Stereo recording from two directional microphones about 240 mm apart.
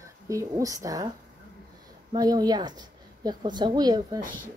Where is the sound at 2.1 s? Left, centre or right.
Centre.